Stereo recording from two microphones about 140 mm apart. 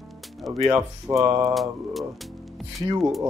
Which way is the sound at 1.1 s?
20° right (ahead or behind).